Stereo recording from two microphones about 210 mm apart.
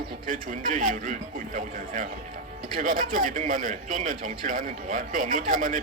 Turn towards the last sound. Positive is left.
turn(degrees=-40)  # may be behind; listen again after turning